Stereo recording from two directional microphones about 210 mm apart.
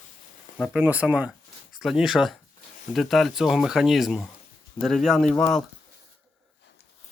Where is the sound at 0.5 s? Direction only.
Centre (ahead or behind).